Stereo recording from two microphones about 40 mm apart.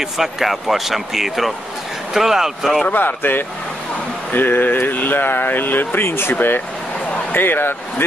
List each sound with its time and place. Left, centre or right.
0.0 s speech: centre
2.9 s speech: left
7.3 s speech: left